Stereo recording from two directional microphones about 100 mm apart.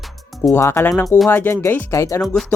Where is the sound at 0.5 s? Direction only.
25° left (ahead or behind).